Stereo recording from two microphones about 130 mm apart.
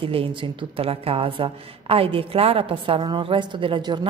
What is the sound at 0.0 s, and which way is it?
A woman's voice, 45° right (ahead or behind).